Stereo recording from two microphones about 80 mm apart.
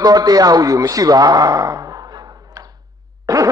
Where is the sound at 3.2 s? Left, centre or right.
Right.